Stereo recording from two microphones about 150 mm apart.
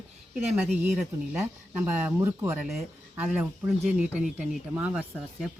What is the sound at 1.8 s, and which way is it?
Speech, 15° right (ahead or behind).